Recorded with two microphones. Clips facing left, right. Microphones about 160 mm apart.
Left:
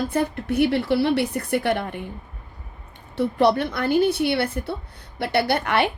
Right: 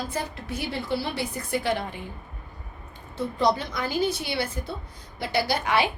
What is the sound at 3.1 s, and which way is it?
A woman's voice, 65° left (ahead or behind).